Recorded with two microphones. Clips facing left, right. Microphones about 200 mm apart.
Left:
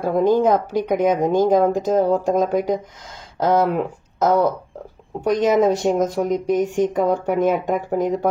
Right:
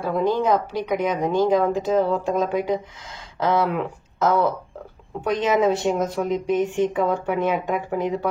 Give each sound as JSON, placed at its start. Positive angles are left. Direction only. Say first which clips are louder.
{"t": 0.0, "sound": "speech", "louder": "left 5 dB", "side_deg": 50}